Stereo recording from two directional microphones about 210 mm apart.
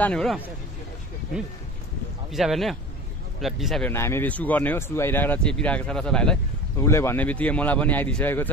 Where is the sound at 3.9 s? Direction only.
10° left (ahead or behind).